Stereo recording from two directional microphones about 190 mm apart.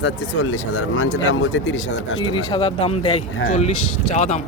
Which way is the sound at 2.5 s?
30° left (ahead or behind).